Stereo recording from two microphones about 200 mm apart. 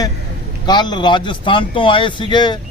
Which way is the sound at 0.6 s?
20° left (ahead or behind).